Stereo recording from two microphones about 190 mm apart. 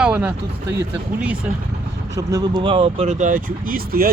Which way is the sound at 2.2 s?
20° right (ahead or behind).